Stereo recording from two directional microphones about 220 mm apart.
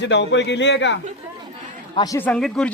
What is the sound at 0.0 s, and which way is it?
Speech, 50° left (ahead or behind).